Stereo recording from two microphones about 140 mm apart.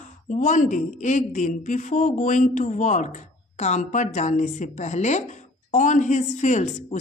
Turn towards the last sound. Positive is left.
turn(degrees=60)  # may be behind; listen again after turning